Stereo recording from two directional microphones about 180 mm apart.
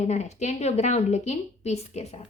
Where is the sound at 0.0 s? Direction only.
40° left (ahead or behind).